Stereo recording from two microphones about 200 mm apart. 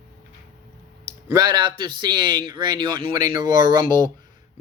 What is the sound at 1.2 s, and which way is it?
Speech, 20° right (ahead or behind).